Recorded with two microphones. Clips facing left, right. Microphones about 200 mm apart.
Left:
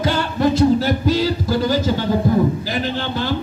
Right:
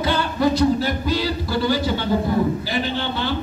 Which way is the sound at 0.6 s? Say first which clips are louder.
Left 4 dB; 45° left (ahead or behind).